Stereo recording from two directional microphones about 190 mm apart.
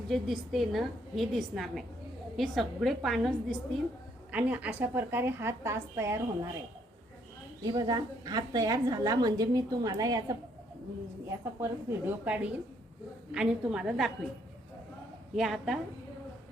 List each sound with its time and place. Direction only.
0.1 s a woman's voice: centre (ahead or behind)
7.6 s a woman's voice: 20° right (ahead or behind); by 14.1 s centre (ahead or behind)
15.4 s a woman's voice: centre (ahead or behind)